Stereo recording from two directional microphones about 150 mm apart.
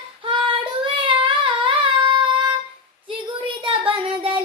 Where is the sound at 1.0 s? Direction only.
35° right (ahead or behind).